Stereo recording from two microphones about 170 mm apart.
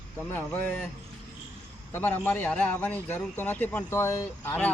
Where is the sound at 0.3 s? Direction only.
10° left (ahead or behind).